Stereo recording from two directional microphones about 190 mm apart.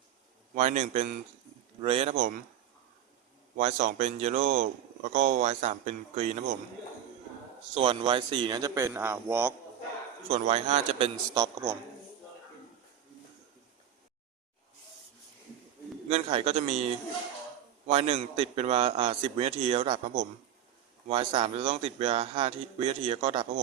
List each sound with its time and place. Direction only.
0.5 s speech: 40° right (ahead or behind)
3.6 s speech: 40° right (ahead or behind)
7.7 s speech: 30° right (ahead or behind); by 9.6 s 10° right (ahead or behind)
10.2 s speech: 35° right (ahead or behind)
11.3 s a man's voice: 20° right (ahead or behind)
16.0 s speech: 35° right (ahead or behind)